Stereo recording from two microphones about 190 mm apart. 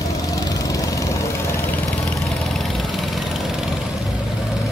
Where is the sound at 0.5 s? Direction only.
20° left (ahead or behind).